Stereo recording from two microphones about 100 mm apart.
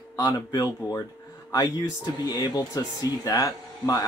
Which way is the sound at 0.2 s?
35° left (ahead or behind).